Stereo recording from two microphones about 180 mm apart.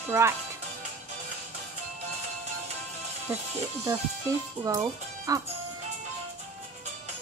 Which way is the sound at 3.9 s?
15° right (ahead or behind).